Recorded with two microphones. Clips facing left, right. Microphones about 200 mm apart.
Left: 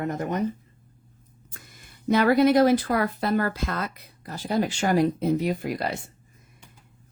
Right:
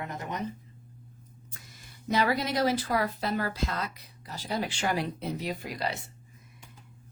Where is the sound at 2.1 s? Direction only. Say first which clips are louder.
Left 9 dB; 55° left (ahead or behind).